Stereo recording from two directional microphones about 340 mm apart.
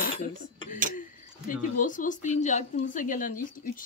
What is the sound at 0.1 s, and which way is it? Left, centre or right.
Dishes, centre.